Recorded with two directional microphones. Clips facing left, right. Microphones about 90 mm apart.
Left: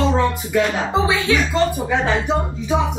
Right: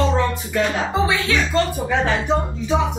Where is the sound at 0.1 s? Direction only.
5° left (ahead or behind).